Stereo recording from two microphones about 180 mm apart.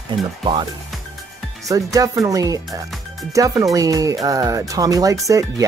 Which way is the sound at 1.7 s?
20° right (ahead or behind).